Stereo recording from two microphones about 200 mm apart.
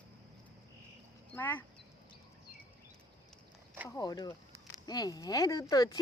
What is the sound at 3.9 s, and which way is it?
Speech, 20° left (ahead or behind).